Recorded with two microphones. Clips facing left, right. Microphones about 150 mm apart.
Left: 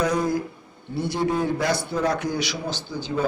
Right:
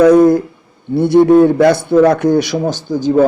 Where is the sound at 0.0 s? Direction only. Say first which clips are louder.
Right 15 dB; 60° right (ahead or behind).